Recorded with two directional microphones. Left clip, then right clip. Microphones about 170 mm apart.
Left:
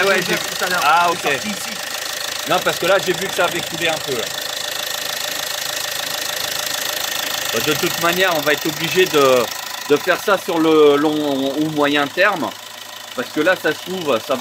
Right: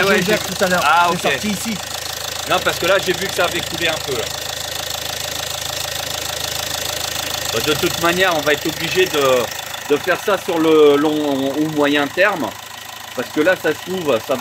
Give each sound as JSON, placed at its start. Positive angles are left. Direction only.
{"t": 0.3, "sound": "speech", "side_deg": -40}
{"t": 0.8, "sound": "speech", "side_deg": 0}
{"t": 2.5, "sound": "speech", "side_deg": 0}
{"t": 7.6, "sound": "speech", "side_deg": 0}
{"t": 13.4, "sound": "speech", "side_deg": -5}